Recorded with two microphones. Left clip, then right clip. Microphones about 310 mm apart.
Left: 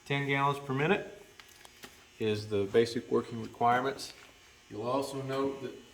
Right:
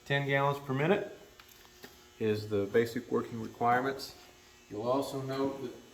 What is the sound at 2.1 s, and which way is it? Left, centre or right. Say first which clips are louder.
Speech: even; left.